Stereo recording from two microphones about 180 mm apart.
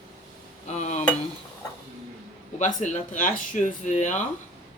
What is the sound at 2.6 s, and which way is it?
Speech, 45° left (ahead or behind).